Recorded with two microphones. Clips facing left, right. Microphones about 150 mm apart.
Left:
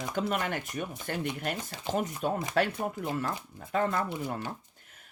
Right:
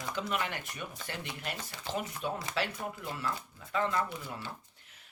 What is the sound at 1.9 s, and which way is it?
Speech, 45° left (ahead or behind).